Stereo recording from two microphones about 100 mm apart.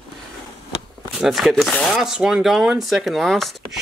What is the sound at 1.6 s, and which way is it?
Speech, 10° left (ahead or behind).